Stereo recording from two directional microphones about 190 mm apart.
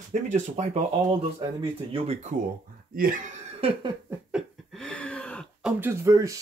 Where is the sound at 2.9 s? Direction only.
50° right (ahead or behind).